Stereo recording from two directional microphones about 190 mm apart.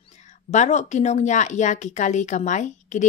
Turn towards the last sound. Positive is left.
turn(degrees=40)  # may be behind; listen again after turning